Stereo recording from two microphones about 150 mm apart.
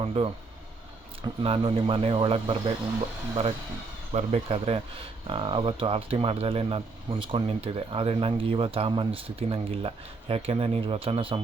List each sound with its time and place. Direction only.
0.0 s speech: 40° right (ahead or behind)
4.1 s speech: 45° right (ahead or behind)